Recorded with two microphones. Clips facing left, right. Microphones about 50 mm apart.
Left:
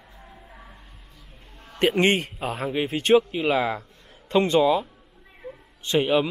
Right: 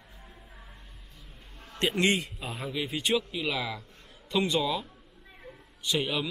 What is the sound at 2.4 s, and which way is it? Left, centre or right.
Speech, left.